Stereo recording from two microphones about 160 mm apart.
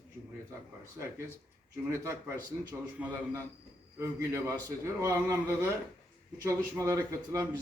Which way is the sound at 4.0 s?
20° right (ahead or behind).